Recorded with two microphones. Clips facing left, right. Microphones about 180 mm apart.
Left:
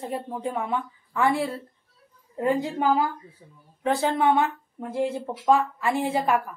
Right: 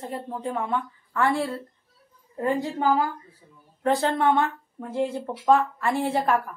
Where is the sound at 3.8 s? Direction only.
5° left (ahead or behind).